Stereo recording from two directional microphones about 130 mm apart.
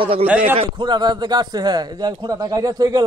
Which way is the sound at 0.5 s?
35° right (ahead or behind).